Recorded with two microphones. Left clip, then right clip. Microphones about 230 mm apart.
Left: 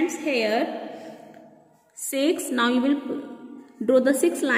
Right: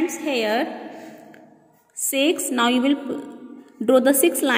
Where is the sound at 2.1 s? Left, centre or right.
Centre.